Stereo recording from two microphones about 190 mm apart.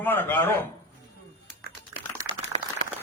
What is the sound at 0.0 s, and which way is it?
Speech, 10° left (ahead or behind).